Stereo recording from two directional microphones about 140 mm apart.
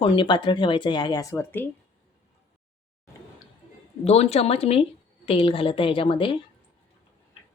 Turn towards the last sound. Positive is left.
turn(degrees=35)  # may be behind; listen again after turning